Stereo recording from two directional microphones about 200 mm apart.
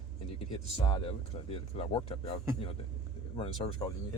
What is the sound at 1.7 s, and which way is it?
Speech, 25° left (ahead or behind).